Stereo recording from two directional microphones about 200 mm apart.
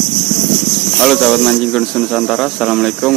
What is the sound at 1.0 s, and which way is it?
Speech, 5° left (ahead or behind).